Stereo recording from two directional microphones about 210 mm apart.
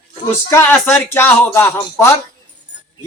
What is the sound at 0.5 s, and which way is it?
A man's voice, 10° left (ahead or behind).